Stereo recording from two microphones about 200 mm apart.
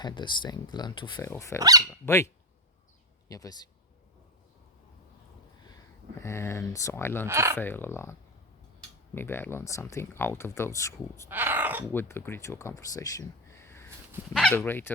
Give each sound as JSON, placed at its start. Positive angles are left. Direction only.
{"t": 0.0, "sound": "speech", "side_deg": 25}
{"t": 6.2, "sound": "speech", "side_deg": 15}
{"t": 7.3, "sound": "speech", "side_deg": -15}
{"t": 7.5, "sound": "speech", "side_deg": 10}
{"t": 9.1, "sound": "speech", "side_deg": 10}
{"t": 11.3, "sound": "speech", "side_deg": -10}
{"t": 11.9, "sound": "speech", "side_deg": 10}